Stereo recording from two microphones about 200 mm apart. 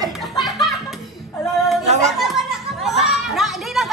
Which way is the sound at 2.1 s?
Centre (ahead or behind).